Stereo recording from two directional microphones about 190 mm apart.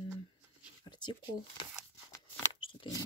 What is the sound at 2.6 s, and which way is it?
Biting, 25° left (ahead or behind).